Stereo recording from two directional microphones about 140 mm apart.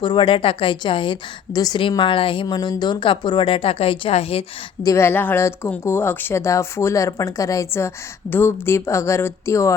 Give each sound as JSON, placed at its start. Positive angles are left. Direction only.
{"t": 0.0, "sound": "speech", "side_deg": 35}
{"t": 4.8, "sound": "speech", "side_deg": 20}